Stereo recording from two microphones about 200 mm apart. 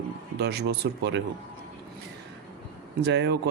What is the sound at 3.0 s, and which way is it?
Speech, 60° right (ahead or behind).